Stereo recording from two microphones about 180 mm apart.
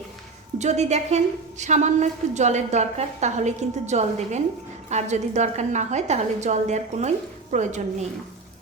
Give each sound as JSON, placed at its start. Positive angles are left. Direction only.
{"t": 0.6, "sound": "a woman's voice", "side_deg": -40}